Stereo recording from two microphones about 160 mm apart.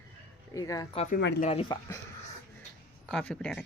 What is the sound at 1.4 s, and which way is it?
Speech, 40° left (ahead or behind).